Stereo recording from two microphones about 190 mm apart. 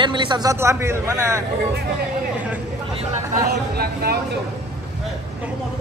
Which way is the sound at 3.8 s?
55° right (ahead or behind).